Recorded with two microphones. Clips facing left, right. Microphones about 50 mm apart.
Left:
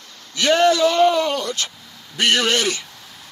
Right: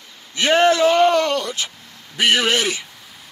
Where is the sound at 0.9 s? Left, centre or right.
Right.